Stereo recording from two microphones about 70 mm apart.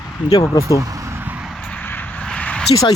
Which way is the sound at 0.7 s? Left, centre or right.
Right.